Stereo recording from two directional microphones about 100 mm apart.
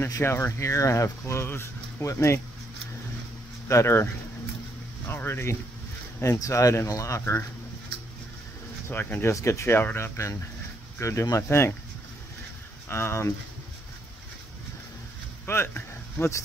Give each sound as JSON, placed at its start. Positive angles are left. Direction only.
{"t": 0.2, "sound": "speech", "side_deg": 25}
{"t": 3.6, "sound": "speech", "side_deg": 30}
{"t": 8.8, "sound": "speech", "side_deg": 25}
{"t": 12.8, "sound": "speech", "side_deg": 25}
{"t": 15.4, "sound": "speech", "side_deg": 25}